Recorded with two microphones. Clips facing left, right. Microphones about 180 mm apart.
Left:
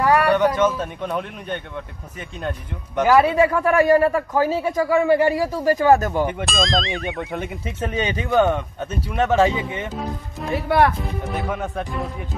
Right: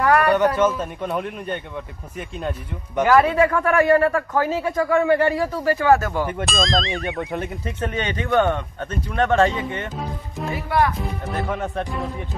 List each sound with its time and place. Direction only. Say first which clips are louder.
0.0 s a sound: even; centre (ahead or behind)
0.6 s speech: even; 5° right (ahead or behind)
3.1 s a man's voice: left 1 dB; 10° left (ahead or behind)
6.2 s speech: left 1 dB; centre (ahead or behind)
10.5 s speech: left 3 dB; 65° left (ahead or behind)
11.3 s speech: right 2 dB; centre (ahead or behind)